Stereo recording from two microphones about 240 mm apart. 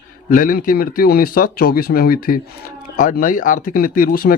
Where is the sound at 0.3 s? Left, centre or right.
Left.